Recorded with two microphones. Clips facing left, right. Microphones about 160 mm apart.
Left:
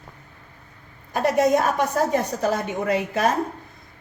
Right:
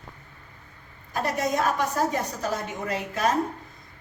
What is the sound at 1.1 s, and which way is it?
A woman's voice, 55° left (ahead or behind).